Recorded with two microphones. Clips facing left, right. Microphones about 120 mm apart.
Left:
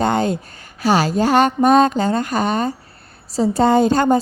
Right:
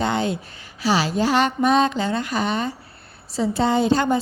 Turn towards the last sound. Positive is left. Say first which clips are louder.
# left 5 dB
turn(degrees=45)  # may be behind; listen again after turning